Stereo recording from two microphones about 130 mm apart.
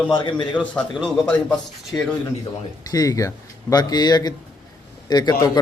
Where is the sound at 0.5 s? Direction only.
10° left (ahead or behind).